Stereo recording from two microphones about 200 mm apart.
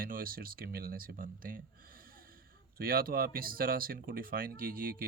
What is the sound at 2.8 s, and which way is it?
Speech, 45° right (ahead or behind).